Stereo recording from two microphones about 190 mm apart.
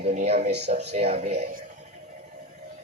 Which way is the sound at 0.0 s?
35° right (ahead or behind).